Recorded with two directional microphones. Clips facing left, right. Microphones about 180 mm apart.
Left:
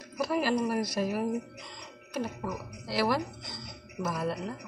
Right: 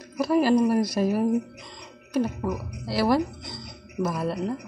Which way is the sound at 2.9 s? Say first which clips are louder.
Right 6 dB; 35° right (ahead or behind).